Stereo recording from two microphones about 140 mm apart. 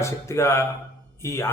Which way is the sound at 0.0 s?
20° left (ahead or behind).